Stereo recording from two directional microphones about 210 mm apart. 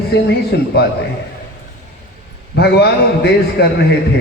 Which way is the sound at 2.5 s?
50° left (ahead or behind).